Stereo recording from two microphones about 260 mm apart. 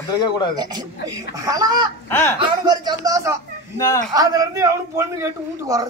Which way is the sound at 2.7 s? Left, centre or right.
Centre.